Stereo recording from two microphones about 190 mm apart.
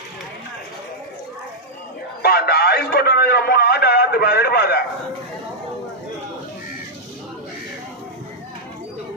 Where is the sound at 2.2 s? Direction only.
55° left (ahead or behind).